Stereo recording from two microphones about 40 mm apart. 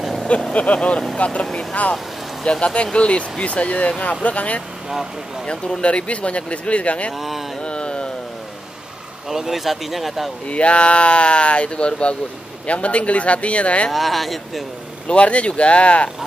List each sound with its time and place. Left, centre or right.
0.5 s speech: left
1.5 s speech: centre; by 4.6 s left
5.5 s speech: left
7.2 s speech: centre
7.6 s carnatic music: left
9.3 s speech: centre
10.5 s speech: left
13.9 s speech: centre
15.0 s speech: left